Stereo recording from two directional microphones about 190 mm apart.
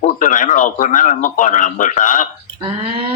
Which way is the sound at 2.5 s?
30° right (ahead or behind).